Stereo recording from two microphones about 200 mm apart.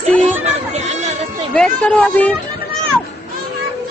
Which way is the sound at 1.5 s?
5° left (ahead or behind).